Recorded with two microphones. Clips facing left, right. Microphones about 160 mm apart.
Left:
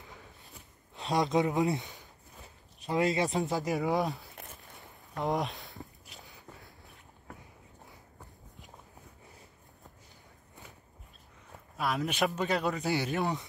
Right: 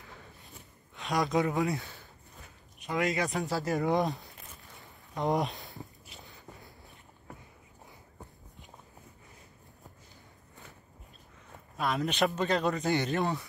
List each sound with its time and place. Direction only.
1.1 s speech: 25° left (ahead or behind)
2.4 s speech: 30° left (ahead or behind)
3.8 s speech: centre (ahead or behind)
4.7 s a sound: centre (ahead or behind)
11.7 s speech: 5° left (ahead or behind)